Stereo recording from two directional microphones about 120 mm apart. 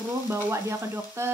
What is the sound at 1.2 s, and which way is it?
Frying, 20° right (ahead or behind).